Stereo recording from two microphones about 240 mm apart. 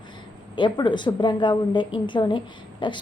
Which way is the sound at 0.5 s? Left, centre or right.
Centre.